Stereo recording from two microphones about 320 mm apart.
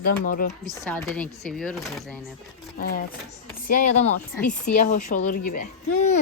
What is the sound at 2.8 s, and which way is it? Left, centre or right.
Speech, left.